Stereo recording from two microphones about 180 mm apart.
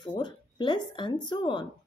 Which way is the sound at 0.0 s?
25° left (ahead or behind).